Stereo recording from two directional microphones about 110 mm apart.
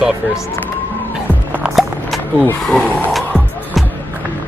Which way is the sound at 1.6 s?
10° right (ahead or behind).